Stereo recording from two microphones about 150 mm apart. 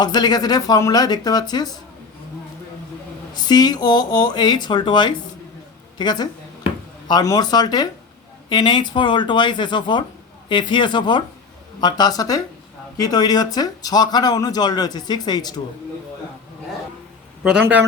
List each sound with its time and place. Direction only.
0.0 s speech: 30° left (ahead or behind)
3.4 s speech: 25° left (ahead or behind)
17.4 s a man's voice: 5° right (ahead or behind)